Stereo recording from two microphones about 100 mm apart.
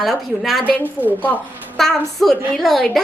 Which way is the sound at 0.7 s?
15° left (ahead or behind).